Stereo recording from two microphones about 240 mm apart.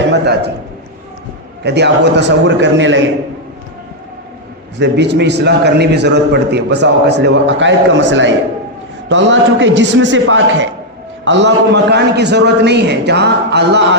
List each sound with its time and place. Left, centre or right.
1.6 s a man's voice: right
4.8 s a man's voice: right